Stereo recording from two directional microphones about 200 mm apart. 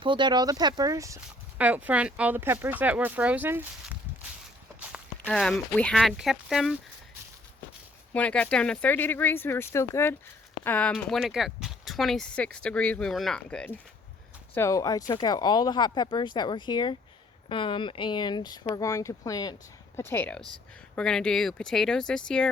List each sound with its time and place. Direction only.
0.0 s speech: 25° right (ahead or behind)
4.8 s walk: 5° right (ahead or behind)
5.3 s speech: 5° left (ahead or behind)
8.1 s speech: 5° left (ahead or behind)
14.5 s speech: 15° left (ahead or behind)